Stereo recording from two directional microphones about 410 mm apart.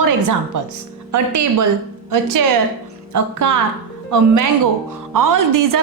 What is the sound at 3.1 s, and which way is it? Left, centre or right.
A woman's voice, right.